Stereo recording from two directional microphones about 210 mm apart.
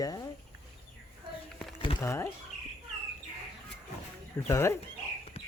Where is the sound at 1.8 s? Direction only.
25° left (ahead or behind).